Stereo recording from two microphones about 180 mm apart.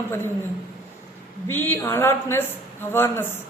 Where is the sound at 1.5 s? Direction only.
10° left (ahead or behind).